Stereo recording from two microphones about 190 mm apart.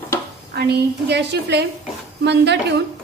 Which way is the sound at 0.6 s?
60° right (ahead or behind).